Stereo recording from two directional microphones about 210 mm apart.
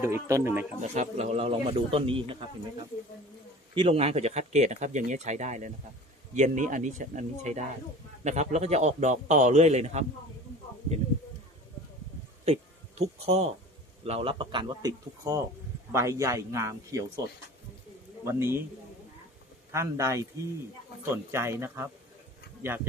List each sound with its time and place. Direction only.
0.0 s a man's voice: 15° right (ahead or behind)
0.9 s speech: 30° right (ahead or behind)
12.5 s a man's voice: 30° right (ahead or behind); by 17.0 s 15° right (ahead or behind)
18.3 s a man's voice: 10° right (ahead or behind)
19.7 s a man's voice: 15° right (ahead or behind)